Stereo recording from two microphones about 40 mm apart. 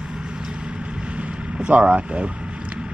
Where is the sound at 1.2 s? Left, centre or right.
Right.